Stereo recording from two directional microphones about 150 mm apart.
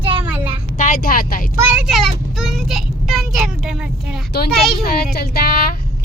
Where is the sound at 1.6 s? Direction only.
5° right (ahead or behind).